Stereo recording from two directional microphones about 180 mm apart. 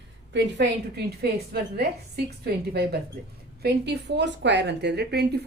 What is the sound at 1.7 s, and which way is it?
A woman's voice, 60° right (ahead or behind).